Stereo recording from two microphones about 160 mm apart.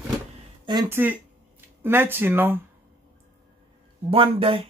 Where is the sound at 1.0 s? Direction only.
15° right (ahead or behind).